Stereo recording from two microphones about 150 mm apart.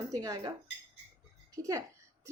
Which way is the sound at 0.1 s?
25° right (ahead or behind).